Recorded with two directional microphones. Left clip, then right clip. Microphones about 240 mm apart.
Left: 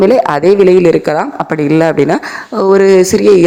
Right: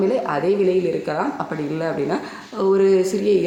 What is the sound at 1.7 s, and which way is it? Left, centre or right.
Speech, left.